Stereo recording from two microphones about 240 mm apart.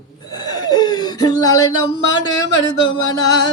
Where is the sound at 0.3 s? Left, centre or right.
Centre.